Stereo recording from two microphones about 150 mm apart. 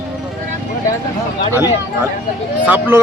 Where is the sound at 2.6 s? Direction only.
10° right (ahead or behind).